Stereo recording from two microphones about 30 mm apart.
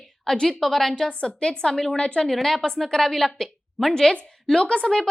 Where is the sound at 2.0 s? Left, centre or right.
Left.